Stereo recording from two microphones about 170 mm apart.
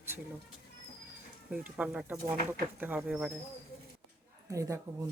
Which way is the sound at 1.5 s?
5° right (ahead or behind).